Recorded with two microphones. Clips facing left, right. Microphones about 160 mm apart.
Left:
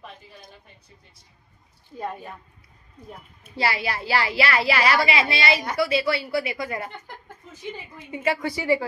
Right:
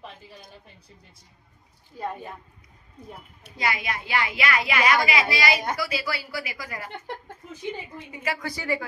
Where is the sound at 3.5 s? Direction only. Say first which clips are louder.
Left 3 dB; 30° left (ahead or behind).